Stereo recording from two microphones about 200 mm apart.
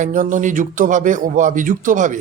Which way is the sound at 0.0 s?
40° right (ahead or behind).